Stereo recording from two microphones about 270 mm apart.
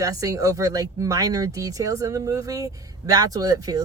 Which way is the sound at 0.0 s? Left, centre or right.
Centre.